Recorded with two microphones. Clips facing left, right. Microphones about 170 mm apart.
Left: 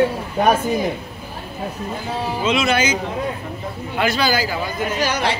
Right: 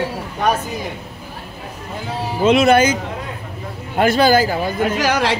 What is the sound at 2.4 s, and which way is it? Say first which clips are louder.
Speech: right 8 dB; 55° right (ahead or behind).